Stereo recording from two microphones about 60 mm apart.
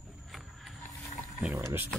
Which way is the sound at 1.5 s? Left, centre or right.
Right.